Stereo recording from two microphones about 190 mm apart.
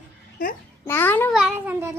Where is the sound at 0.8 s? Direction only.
10° left (ahead or behind).